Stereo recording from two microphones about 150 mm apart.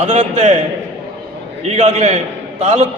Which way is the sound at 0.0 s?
50° right (ahead or behind).